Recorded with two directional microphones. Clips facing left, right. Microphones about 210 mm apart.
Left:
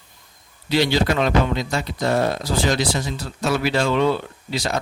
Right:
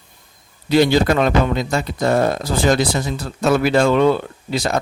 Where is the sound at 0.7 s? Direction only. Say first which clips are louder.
Right 5 dB; 50° right (ahead or behind).